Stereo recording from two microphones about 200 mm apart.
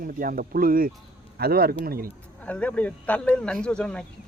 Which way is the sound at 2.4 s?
5° left (ahead or behind).